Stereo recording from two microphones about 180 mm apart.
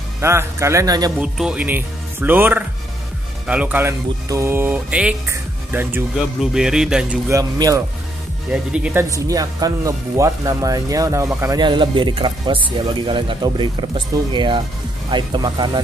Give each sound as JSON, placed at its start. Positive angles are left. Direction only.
{"t": 0.2, "sound": "speech", "side_deg": -15}
{"t": 1.2, "sound": "speech", "side_deg": -5}
{"t": 7.2, "sound": "speech", "side_deg": -20}
{"t": 8.5, "sound": "speech", "side_deg": -5}
{"t": 9.1, "sound": "speech", "side_deg": -20}